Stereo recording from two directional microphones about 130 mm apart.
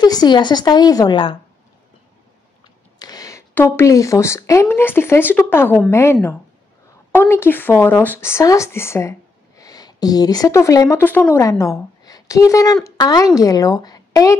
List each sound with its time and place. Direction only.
0.0 s a woman's voice: 30° left (ahead or behind)
3.0 s speech: 30° left (ahead or behind)